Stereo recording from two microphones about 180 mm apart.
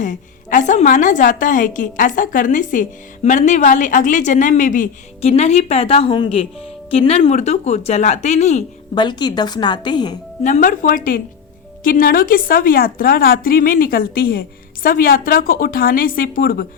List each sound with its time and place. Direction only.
0.0 s a woman's voice: 45° left (ahead or behind)
9.0 s a woman's voice: 25° left (ahead or behind)
10.4 s a woman's voice: 45° left (ahead or behind)